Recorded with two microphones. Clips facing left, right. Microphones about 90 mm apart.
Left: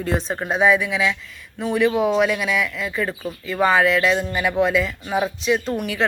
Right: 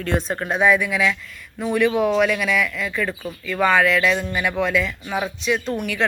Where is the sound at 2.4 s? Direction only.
5° left (ahead or behind).